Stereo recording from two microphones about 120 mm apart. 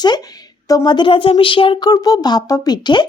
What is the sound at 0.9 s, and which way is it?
A woman's voice, 40° left (ahead or behind).